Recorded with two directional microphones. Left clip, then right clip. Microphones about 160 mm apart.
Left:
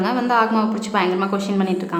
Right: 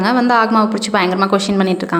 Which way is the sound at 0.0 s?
35° right (ahead or behind).